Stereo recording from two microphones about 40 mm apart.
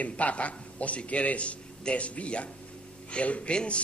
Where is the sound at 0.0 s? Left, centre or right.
Left.